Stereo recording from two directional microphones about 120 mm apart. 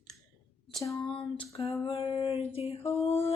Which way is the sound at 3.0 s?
60° left (ahead or behind).